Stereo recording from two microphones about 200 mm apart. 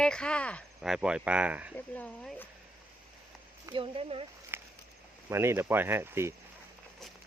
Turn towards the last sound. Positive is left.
turn(degrees=-10)  # may be behind; listen again after turning